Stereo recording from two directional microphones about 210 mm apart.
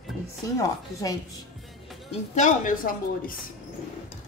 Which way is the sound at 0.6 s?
15° left (ahead or behind).